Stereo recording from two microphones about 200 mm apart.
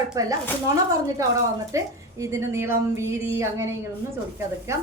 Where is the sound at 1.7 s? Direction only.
15° right (ahead or behind).